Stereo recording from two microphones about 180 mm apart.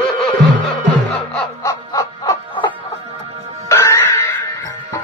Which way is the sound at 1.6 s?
15° left (ahead or behind).